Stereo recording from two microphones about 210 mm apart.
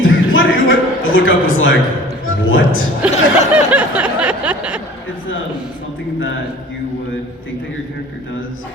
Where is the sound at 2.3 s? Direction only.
65° left (ahead or behind).